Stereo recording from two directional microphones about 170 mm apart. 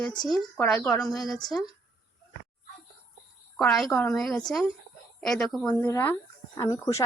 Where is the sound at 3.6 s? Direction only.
Centre (ahead or behind).